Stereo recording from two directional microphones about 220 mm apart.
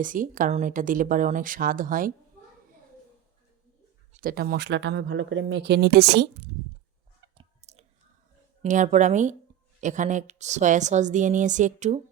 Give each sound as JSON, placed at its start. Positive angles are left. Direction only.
{"t": 0.0, "sound": "speech", "side_deg": -40}
{"t": 4.1, "sound": "speech", "side_deg": -40}
{"t": 7.3, "sound": "chewing", "side_deg": -30}
{"t": 8.6, "sound": "speech", "side_deg": -35}